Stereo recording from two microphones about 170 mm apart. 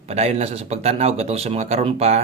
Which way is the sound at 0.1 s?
40° right (ahead or behind).